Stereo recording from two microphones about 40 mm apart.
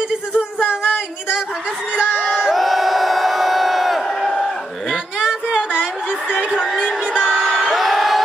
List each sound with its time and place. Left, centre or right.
0.3 s a sound: right
2.0 s crowd: right
2.5 s crowd: centre
7.7 s crowd: centre